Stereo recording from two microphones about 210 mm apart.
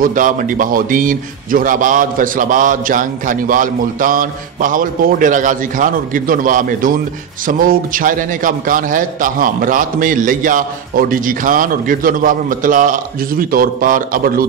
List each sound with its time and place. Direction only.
0.0 s a man's voice: 40° right (ahead or behind)